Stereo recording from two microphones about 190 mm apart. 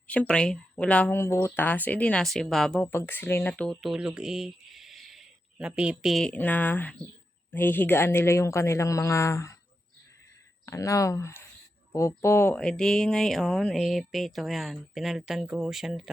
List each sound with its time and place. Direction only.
0.1 s speech: 5° left (ahead or behind)
10.7 s speech: 15° left (ahead or behind); by 16.0 s centre (ahead or behind)